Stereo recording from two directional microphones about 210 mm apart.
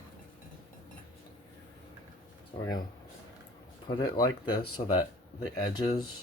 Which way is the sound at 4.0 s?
20° left (ahead or behind).